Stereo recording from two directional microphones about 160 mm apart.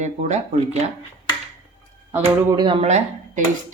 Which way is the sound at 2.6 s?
30° right (ahead or behind).